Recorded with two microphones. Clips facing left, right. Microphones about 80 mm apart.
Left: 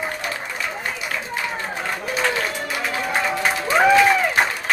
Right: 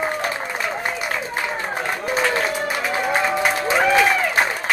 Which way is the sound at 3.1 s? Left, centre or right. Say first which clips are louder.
Right 2 dB; centre.